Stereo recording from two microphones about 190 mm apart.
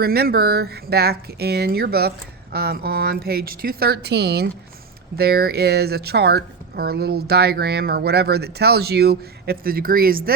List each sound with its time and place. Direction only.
0.0 s speech: 55° right (ahead or behind)